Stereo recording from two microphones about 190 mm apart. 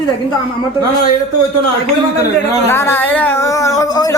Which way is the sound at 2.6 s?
10° left (ahead or behind).